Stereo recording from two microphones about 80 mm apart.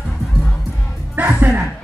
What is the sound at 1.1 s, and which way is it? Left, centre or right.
Music, right.